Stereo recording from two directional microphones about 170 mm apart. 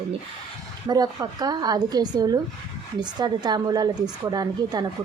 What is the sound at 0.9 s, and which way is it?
A woman's voice, 20° right (ahead or behind).